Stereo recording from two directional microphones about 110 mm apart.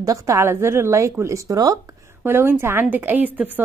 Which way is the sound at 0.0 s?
30° right (ahead or behind).